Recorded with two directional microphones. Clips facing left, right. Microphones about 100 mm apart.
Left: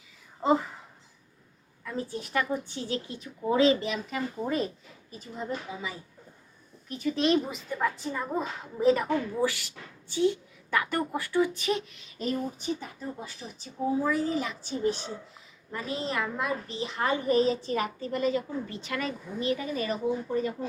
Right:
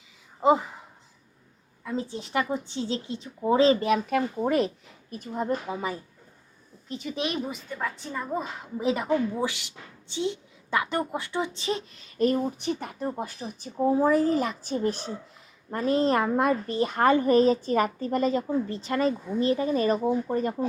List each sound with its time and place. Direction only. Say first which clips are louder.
0.4 s speech: right 3 dB; 20° right (ahead or behind)
1.8 s a woman's voice: right 3 dB; 20° right (ahead or behind)
3.8 s speech: right 8 dB; 55° right (ahead or behind); by 4.7 s 70° right (ahead or behind)
5.1 s a woman's voice: right 6 dB; 55° right (ahead or behind)
6.8 s speech: left 3 dB; 25° right (ahead or behind)
7.2 s a woman's voice: left 5 dB; 5° right (ahead or behind)
8.8 s a woman's voice: left 1 dB; 15° right (ahead or behind); by 12.0 s 30° right (ahead or behind)
12.2 s a woman's voice: right 7 dB; 60° right (ahead or behind); by 20.5 s 45° right (ahead or behind)